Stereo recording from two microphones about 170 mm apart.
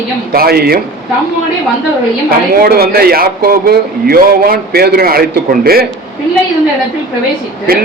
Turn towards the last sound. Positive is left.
turn(degrees=-60)  # may be behind; listen again after turning